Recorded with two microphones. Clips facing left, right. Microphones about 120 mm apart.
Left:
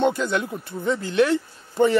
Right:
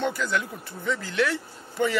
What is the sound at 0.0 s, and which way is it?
Speech, 20° left (ahead or behind).